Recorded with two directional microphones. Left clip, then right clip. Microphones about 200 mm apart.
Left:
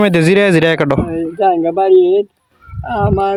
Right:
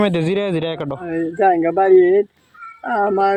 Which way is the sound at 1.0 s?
10° left (ahead or behind).